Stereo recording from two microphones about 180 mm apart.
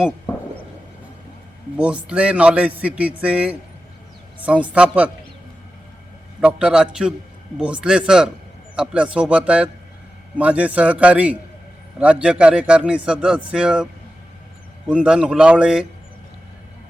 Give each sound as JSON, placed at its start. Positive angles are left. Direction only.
{"t": 1.7, "sound": "a man's voice", "side_deg": -5}
{"t": 6.4, "sound": "a man's voice", "side_deg": -5}
{"t": 14.8, "sound": "a man's voice", "side_deg": -5}